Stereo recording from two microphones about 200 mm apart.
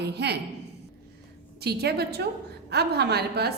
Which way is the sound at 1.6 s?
55° right (ahead or behind).